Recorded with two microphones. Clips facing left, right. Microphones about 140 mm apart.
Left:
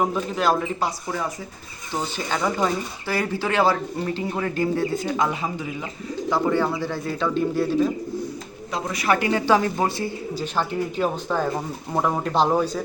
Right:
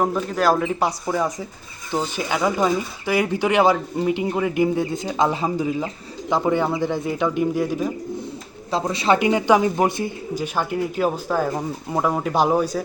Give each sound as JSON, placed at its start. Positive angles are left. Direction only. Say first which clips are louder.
{"t": 0.0, "sound": "a man's voice", "louder": "right 2 dB", "side_deg": 0}
{"t": 2.1, "sound": "speech", "louder": "right 2 dB", "side_deg": -10}
{"t": 5.1, "sound": "speech", "louder": "right 4 dB", "side_deg": -30}
{"t": 6.3, "sound": "speech", "louder": "right 2 dB", "side_deg": -20}
{"t": 8.7, "sound": "speech", "louder": "right 4 dB", "side_deg": -25}